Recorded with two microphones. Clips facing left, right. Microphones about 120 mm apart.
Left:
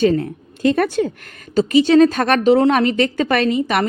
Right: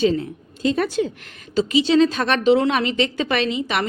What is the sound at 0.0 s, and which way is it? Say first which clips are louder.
Speech: left 3 dB; 55° left (ahead or behind).